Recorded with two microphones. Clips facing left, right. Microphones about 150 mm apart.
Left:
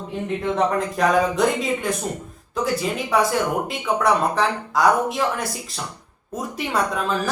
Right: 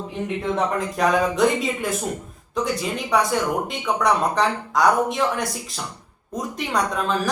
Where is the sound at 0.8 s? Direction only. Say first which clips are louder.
Left 1 dB; centre (ahead or behind).